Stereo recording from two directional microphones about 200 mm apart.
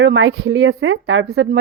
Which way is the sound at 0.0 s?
70° right (ahead or behind).